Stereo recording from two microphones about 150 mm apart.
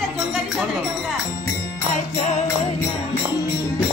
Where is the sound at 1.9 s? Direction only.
50° left (ahead or behind).